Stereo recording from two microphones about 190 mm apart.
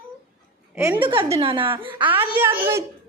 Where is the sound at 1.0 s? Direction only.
25° right (ahead or behind).